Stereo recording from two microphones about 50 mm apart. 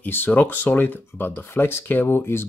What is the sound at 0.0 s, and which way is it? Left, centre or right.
Speech, left.